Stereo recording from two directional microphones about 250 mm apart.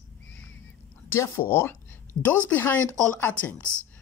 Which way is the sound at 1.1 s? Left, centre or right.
Centre.